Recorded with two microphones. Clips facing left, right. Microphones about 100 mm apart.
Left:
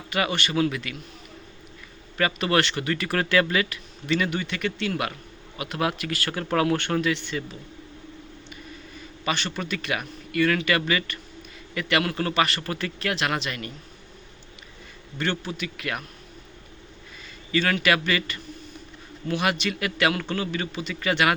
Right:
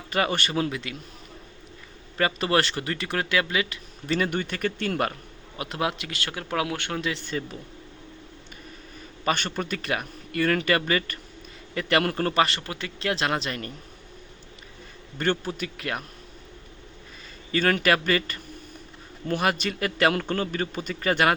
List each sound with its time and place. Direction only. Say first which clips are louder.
0.1 s a man's voice: even; 35° right (ahead or behind)
2.1 s speech: even; 30° right (ahead or behind)
3.2 s speech: left 3 dB; 15° right (ahead or behind)
4.0 s a man's voice: even; 40° right (ahead or behind)
5.8 s speech: left 2 dB; 20° right (ahead or behind)
6.4 s speech: left 5 dB; 10° right (ahead or behind)
7.0 s a man's voice: left 3 dB; 35° right (ahead or behind)
9.2 s a man's voice: right 2 dB; 45° right (ahead or behind)
15.2 s a man's voice: right 2 dB; 45° right (ahead or behind)
17.5 s a man's voice: right 1 dB; 45° right (ahead or behind)